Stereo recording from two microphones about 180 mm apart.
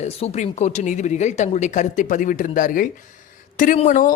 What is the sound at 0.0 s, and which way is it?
A woman's voice, 35° left (ahead or behind).